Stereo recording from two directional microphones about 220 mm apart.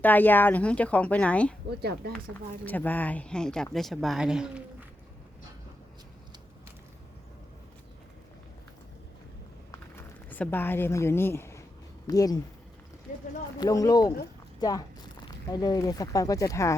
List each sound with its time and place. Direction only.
0.0 s a woman's voice: 10° left (ahead or behind)
1.8 s speech: 45° right (ahead or behind)
2.6 s speech: 10° left (ahead or behind)
9.7 s a sound: 10° left (ahead or behind)
12.0 s a woman's voice: 15° left (ahead or behind)
13.6 s a woman's voice: 15° left (ahead or behind)